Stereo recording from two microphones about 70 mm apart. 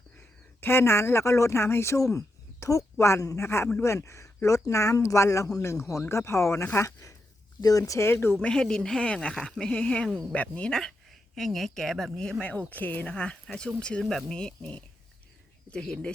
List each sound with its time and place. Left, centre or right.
0.2 s speech: left
7.6 s speech: left
7.9 s speech: left
8.4 s speech: centre
13.1 s speech: centre